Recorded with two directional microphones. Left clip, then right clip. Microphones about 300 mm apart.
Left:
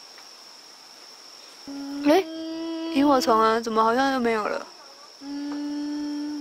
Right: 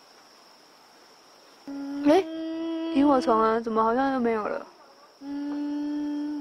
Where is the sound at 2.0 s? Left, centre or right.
Centre.